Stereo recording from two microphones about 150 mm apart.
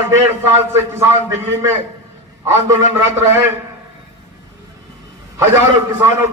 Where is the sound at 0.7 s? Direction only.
15° right (ahead or behind).